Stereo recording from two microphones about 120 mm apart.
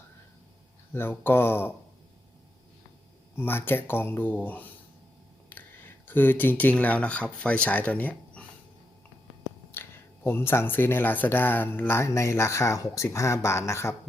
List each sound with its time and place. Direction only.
0.9 s speech: 20° left (ahead or behind)
3.3 s speech: 20° left (ahead or behind)
9.7 s speech: 20° left (ahead or behind)